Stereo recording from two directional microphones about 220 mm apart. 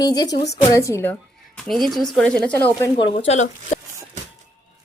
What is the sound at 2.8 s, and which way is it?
Speech, 20° left (ahead or behind).